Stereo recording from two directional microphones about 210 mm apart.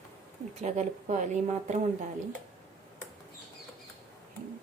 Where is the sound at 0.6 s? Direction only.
35° right (ahead or behind).